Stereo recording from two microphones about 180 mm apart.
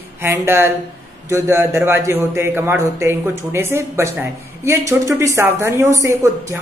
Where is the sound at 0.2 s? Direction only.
15° right (ahead or behind).